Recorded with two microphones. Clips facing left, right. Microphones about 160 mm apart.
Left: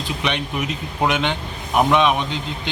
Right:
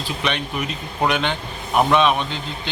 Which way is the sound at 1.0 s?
15° left (ahead or behind).